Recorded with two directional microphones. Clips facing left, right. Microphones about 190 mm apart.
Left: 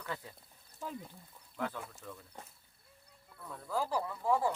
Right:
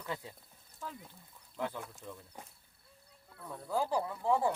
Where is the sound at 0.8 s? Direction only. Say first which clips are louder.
Left 3 dB; 15° left (ahead or behind).